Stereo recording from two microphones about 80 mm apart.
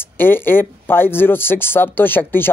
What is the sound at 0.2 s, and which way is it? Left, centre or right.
Speech, left.